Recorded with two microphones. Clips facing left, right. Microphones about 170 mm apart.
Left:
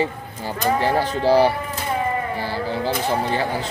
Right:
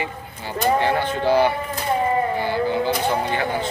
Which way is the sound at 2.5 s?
35° left (ahead or behind).